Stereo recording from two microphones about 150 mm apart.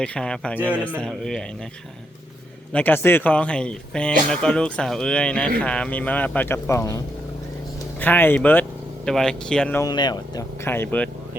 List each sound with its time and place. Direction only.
0.0 s speech: 5° left (ahead or behind)
2.7 s speech: 15° left (ahead or behind)
9.7 s speech: 25° left (ahead or behind)
10.7 s speech: 10° left (ahead or behind)